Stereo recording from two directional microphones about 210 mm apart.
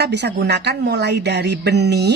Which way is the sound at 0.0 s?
50° right (ahead or behind).